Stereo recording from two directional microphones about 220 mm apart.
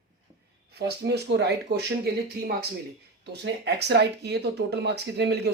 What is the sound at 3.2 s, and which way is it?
Speech, 50° right (ahead or behind).